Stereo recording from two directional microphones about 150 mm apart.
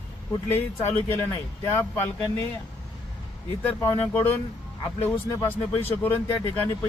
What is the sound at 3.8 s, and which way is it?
A man's voice, 15° left (ahead or behind).